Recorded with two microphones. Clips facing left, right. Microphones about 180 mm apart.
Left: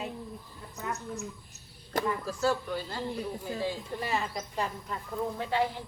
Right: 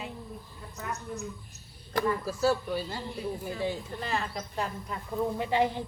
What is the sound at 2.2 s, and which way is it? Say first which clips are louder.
Speech: right 2 dB; 10° right (ahead or behind).